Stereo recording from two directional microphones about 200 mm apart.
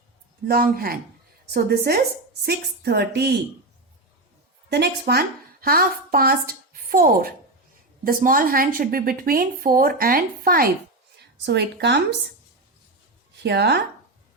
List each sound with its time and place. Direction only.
0.4 s a woman's voice: 50° right (ahead or behind)
4.7 s a woman's voice: 55° right (ahead or behind)
11.4 s speech: 60° right (ahead or behind)
13.4 s speech: 55° right (ahead or behind)